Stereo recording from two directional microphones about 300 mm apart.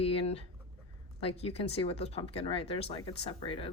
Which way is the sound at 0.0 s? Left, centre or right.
Centre.